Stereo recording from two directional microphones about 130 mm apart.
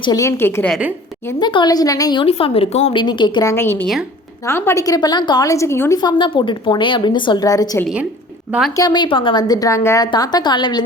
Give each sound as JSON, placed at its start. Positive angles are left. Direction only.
{"t": 0.2, "sound": "a woman's voice", "side_deg": 20}
{"t": 1.4, "sound": "a woman's voice", "side_deg": 35}
{"t": 2.2, "sound": "a woman's voice", "side_deg": 45}
{"t": 2.9, "sound": "a woman's voice", "side_deg": 35}
{"t": 3.5, "sound": "a woman's voice", "side_deg": 20}
{"t": 6.0, "sound": "a woman's voice", "side_deg": 35}
{"t": 10.1, "sound": "a woman's voice", "side_deg": 30}